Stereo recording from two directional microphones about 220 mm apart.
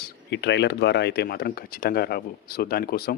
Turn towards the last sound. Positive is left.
turn(degrees=45)  # may be behind; listen again after turning